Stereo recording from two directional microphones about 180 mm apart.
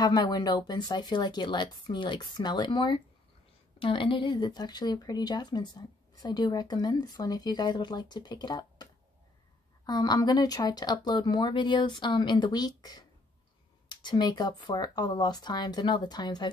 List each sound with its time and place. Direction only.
0.0 s speech: 20° left (ahead or behind)
9.8 s speech: 20° left (ahead or behind)